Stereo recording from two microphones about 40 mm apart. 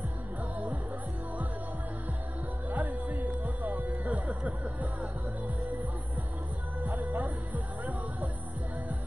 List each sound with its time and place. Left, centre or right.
0.4 s music: right
2.7 s music: right
6.8 s music: right